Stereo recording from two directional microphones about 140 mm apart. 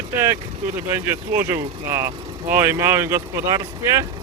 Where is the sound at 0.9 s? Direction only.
15° right (ahead or behind).